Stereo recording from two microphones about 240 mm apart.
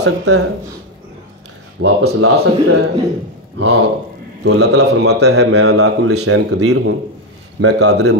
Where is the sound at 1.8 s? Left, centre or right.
Right.